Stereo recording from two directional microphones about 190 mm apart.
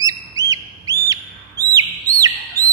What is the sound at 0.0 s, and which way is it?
Bird, 20° right (ahead or behind).